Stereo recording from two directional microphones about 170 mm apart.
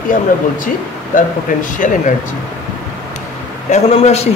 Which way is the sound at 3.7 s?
40° left (ahead or behind).